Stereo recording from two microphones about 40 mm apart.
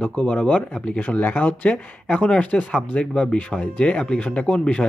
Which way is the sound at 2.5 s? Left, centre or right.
Centre.